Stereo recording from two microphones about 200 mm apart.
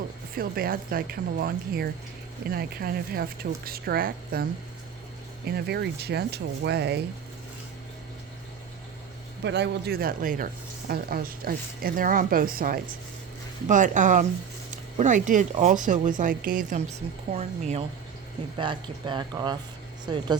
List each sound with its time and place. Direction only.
0.3 s speech: 45° right (ahead or behind)
5.5 s speech: 55° right (ahead or behind)
9.4 s speech: 60° right (ahead or behind); by 20.3 s 25° right (ahead or behind)